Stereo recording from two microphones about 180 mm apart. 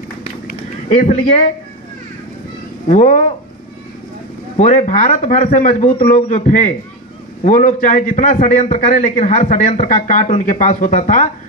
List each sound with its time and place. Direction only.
0.5 s a sound: 45° left (ahead or behind)
2.9 s a man's voice: 45° left (ahead or behind)
4.6 s a man's voice: 40° left (ahead or behind)